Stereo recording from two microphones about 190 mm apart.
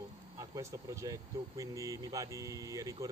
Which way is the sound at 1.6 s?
15° right (ahead or behind).